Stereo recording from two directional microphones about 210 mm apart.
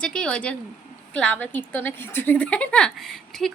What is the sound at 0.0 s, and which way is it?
Speech, 5° left (ahead or behind).